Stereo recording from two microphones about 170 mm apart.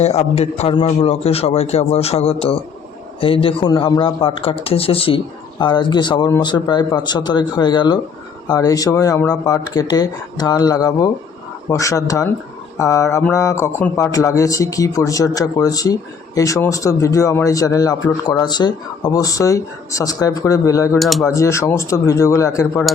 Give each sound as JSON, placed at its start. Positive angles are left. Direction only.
{"t": 0.0, "sound": "a man's voice", "side_deg": 40}
{"t": 21.0, "sound": "speech", "side_deg": 0}
{"t": 21.2, "sound": "speech", "side_deg": 20}